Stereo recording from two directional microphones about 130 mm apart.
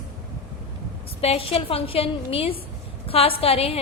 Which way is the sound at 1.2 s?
50° left (ahead or behind).